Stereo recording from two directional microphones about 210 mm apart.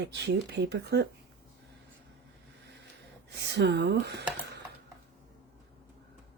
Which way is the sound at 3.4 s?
55° right (ahead or behind).